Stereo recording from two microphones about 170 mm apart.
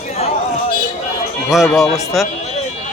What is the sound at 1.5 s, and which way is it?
Speech, centre (ahead or behind).